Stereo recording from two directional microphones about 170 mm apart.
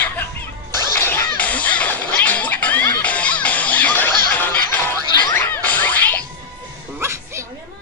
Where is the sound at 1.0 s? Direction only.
10° left (ahead or behind).